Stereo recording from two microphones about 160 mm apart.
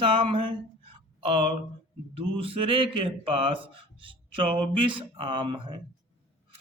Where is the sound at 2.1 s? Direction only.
35° right (ahead or behind).